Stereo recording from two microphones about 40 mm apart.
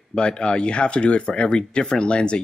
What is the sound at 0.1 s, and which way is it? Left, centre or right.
Speech, left.